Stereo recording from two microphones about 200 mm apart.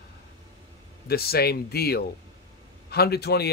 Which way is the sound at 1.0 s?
50° left (ahead or behind).